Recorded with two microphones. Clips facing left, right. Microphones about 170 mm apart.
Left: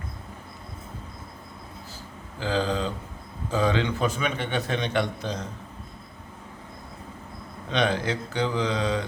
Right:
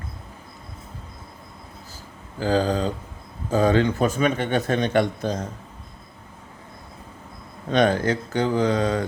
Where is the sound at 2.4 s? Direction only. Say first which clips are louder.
Right 5 dB; 45° right (ahead or behind).